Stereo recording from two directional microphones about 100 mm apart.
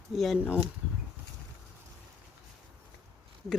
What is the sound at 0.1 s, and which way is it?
Speech, centre (ahead or behind).